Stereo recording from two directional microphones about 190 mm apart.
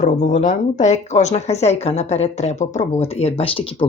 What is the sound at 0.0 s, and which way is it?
Speech, 40° left (ahead or behind).